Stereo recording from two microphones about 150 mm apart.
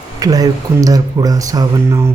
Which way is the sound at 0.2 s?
25° right (ahead or behind).